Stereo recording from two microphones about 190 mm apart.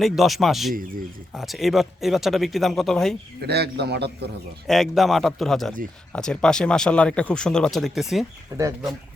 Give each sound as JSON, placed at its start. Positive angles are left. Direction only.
{"t": 0.0, "sound": "speech", "side_deg": 0}
{"t": 0.7, "sound": "speech", "side_deg": -45}
{"t": 1.3, "sound": "speech", "side_deg": 0}
{"t": 3.4, "sound": "a man's voice", "side_deg": -60}
{"t": 4.6, "sound": "speech", "side_deg": 0}